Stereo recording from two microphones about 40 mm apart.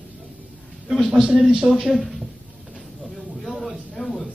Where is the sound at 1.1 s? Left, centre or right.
Right.